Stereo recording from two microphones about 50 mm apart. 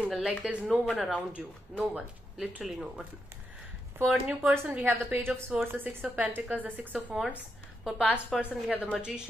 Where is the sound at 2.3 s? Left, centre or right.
Centre.